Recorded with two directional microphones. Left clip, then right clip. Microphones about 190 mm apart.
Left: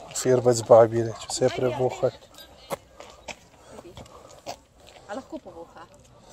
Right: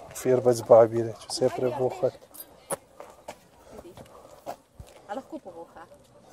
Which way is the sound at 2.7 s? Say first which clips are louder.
Left 1 dB; 10° right (ahead or behind).